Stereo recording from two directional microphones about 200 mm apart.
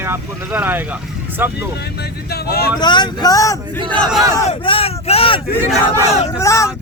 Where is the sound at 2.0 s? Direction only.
50° left (ahead or behind).